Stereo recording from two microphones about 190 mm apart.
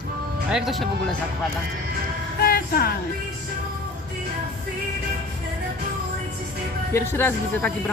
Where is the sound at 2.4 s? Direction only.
50° left (ahead or behind).